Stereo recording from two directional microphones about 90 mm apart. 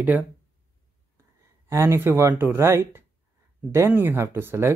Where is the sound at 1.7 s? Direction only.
30° right (ahead or behind).